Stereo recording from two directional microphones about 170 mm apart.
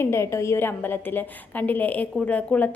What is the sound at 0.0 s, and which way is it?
A woman's voice, 15° left (ahead or behind).